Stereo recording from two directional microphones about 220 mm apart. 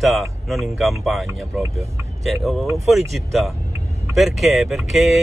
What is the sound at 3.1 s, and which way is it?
Speech, centre (ahead or behind).